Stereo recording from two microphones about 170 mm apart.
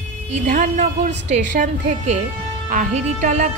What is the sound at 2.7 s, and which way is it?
Speech, 50° right (ahead or behind).